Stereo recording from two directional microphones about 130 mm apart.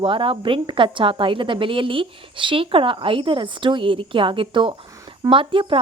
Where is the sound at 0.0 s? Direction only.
40° right (ahead or behind).